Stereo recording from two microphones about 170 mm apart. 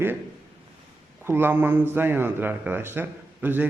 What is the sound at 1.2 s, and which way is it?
A man's voice, 15° right (ahead or behind).